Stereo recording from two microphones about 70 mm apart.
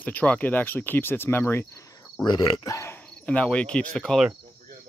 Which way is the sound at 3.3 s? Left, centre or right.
Centre.